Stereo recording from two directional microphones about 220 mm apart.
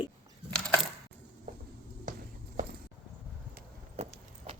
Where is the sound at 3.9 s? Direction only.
30° right (ahead or behind).